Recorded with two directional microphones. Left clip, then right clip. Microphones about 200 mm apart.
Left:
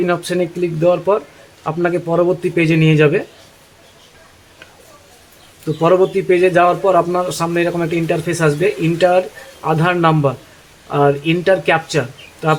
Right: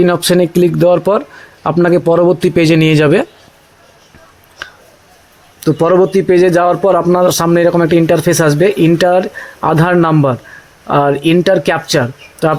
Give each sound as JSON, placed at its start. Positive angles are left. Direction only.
{"t": 0.0, "sound": "a man's voice", "side_deg": -40}
{"t": 5.8, "sound": "a man's voice", "side_deg": -40}